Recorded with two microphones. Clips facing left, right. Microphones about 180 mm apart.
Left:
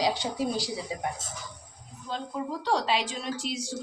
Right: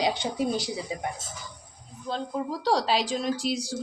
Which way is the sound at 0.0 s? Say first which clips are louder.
Right 1 dB; 20° right (ahead or behind).